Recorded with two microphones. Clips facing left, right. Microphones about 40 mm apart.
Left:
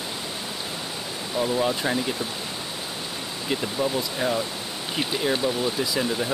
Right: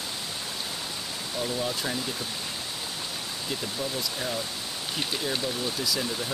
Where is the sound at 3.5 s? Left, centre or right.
Left.